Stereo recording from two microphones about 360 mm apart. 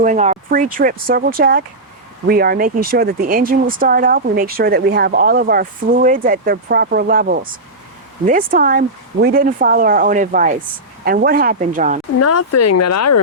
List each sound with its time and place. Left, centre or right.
0.0 s speech: centre
12.2 s speech: left